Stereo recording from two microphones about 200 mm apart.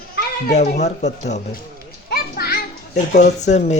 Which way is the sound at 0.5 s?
35° left (ahead or behind).